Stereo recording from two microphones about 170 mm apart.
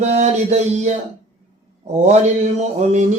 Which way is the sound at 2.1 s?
45° right (ahead or behind).